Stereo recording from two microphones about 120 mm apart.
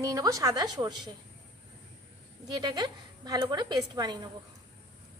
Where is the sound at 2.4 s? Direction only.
35° right (ahead or behind).